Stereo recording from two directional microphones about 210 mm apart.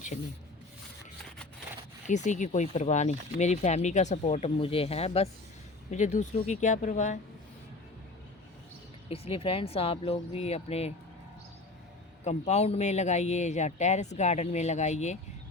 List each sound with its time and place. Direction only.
0.1 s speech: 35° left (ahead or behind)
2.0 s speech: 35° left (ahead or behind)
9.0 s speech: 25° left (ahead or behind)
12.2 s speech: 30° left (ahead or behind)